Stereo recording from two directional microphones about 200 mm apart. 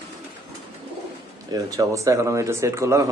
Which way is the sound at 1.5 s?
15° right (ahead or behind).